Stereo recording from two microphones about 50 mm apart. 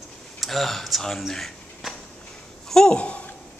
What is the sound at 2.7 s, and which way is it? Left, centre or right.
Speech, centre.